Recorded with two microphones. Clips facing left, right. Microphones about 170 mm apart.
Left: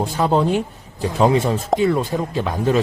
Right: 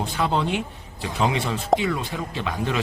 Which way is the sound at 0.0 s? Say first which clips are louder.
Left 6 dB; 40° left (ahead or behind).